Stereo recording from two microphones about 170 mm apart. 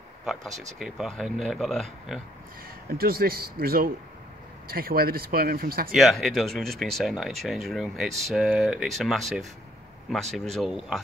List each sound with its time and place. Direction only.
0.2 s speech: centre (ahead or behind)
2.9 s speech: 65° right (ahead or behind)
5.9 s speech: centre (ahead or behind)